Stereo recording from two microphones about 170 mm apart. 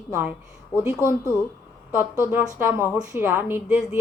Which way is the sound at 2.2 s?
10° right (ahead or behind).